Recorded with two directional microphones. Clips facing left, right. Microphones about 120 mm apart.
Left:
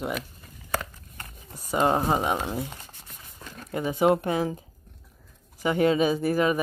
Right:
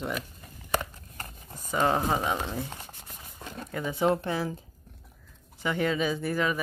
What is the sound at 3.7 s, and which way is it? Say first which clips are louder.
Speech: left 4 dB; 20° left (ahead or behind).